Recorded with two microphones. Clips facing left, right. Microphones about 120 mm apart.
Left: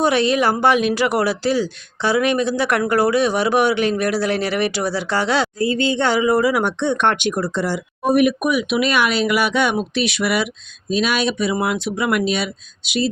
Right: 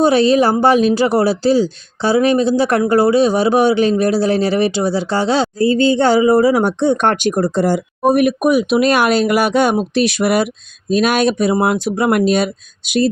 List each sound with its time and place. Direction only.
0.0 s speech: 30° right (ahead or behind)